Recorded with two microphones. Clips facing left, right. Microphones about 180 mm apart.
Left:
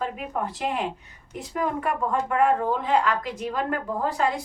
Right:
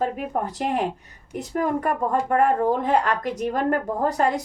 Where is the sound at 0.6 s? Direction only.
45° right (ahead or behind).